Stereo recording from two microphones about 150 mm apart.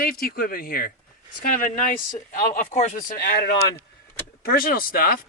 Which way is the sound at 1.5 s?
60° left (ahead or behind).